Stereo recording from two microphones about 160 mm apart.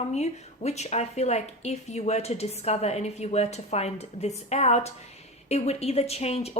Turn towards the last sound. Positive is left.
turn(degrees=40)  # may be behind; listen again after turning